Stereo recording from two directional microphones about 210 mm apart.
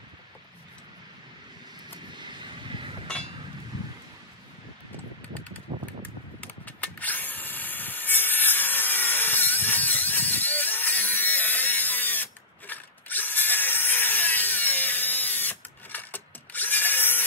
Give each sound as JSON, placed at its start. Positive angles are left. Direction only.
{"t": 2.1, "sound": "vehicle", "side_deg": -20}
{"t": 5.7, "sound": "mechanical fan", "side_deg": -30}
{"t": 6.4, "sound": "drill", "side_deg": 5}